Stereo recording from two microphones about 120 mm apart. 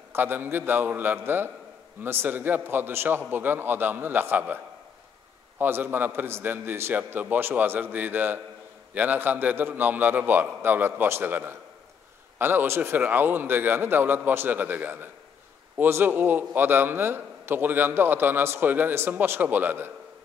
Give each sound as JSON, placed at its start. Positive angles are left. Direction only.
{"t": 0.1, "sound": "a man's voice", "side_deg": -15}
{"t": 5.6, "sound": "a man's voice", "side_deg": -15}